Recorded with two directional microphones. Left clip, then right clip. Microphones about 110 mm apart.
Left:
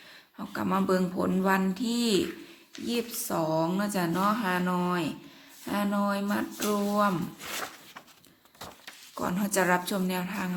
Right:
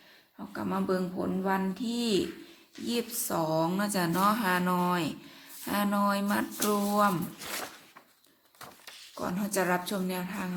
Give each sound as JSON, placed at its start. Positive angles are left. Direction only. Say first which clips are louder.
{"t": 0.3, "sound": "speech", "louder": "left 4 dB", "side_deg": 25}
{"t": 1.1, "sound": "speech", "louder": "left 4 dB", "side_deg": 35}
{"t": 1.7, "sound": "speech", "louder": "left 2 dB", "side_deg": 20}
{"t": 2.8, "sound": "a woman's voice", "louder": "left 1 dB", "side_deg": 0}
{"t": 7.1, "sound": "speech", "louder": "left 1 dB", "side_deg": -5}
{"t": 9.1, "sound": "a woman's voice", "louder": "left 3 dB", "side_deg": 20}